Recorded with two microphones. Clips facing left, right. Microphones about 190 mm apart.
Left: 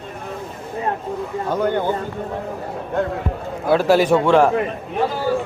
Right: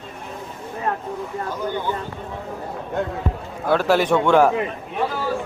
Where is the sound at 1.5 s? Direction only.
60° left (ahead or behind).